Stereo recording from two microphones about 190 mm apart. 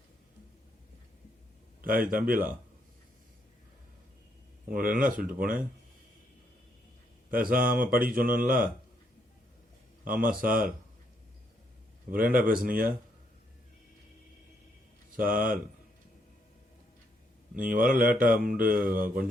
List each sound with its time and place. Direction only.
1.8 s speech: 50° right (ahead or behind)
4.7 s speech: 45° right (ahead or behind)
7.3 s speech: 50° right (ahead or behind)
10.0 s speech: 50° right (ahead or behind)
12.1 s speech: 50° right (ahead or behind)
15.1 s speech: 50° right (ahead or behind)
17.5 s speech: 45° right (ahead or behind)